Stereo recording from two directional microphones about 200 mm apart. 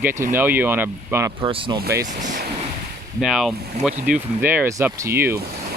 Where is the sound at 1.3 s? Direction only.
25° right (ahead or behind).